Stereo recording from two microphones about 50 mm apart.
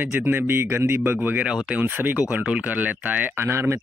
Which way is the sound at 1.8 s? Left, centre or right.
Right.